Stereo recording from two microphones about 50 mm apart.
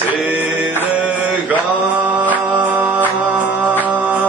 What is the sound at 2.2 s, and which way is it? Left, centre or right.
Music, right.